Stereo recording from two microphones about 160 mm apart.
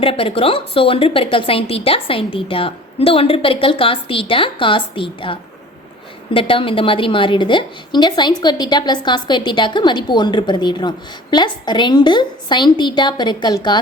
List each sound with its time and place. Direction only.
0.0 s a woman's voice: 35° left (ahead or behind)